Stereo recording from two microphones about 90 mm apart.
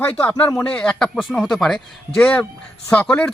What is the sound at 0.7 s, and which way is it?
A man's voice, 10° left (ahead or behind).